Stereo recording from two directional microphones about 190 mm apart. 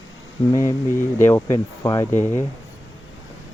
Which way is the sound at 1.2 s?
15° left (ahead or behind).